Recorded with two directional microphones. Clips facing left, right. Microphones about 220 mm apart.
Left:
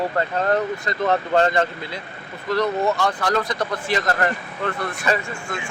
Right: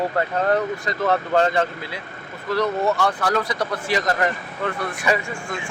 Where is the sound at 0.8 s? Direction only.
5° right (ahead or behind).